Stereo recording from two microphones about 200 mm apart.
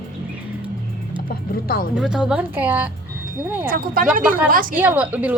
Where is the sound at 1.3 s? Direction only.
45° left (ahead or behind).